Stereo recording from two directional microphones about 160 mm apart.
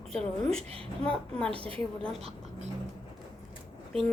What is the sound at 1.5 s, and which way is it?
Speech, 35° right (ahead or behind).